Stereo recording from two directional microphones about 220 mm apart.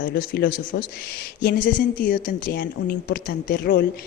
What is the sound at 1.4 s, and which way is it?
A woman's voice, 40° left (ahead or behind).